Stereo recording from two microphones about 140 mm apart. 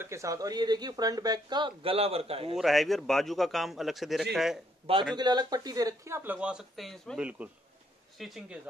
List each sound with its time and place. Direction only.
0.0 s speech: 20° right (ahead or behind); by 2.5 s 45° right (ahead or behind)
2.5 s a man's voice: centre (ahead or behind)
5.1 s a man's voice: 30° right (ahead or behind); by 8.5 s 5° right (ahead or behind)